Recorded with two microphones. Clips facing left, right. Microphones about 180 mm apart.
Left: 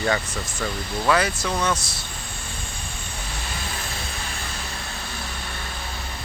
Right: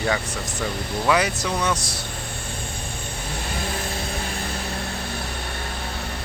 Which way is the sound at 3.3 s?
55° right (ahead or behind).